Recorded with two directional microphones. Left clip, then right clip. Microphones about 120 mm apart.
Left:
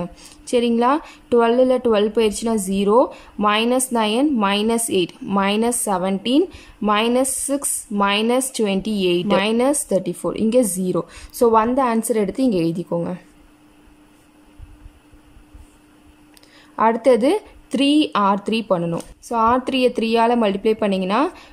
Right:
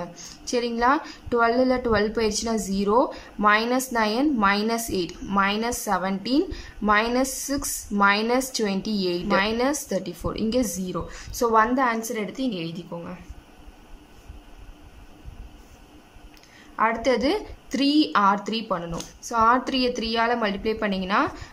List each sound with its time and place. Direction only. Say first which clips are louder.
0.0 s a woman's voice: left 3 dB; 25° left (ahead or behind); by 13.2 s 50° left (ahead or behind)
16.7 s a woman's voice: left 7 dB; 35° left (ahead or behind)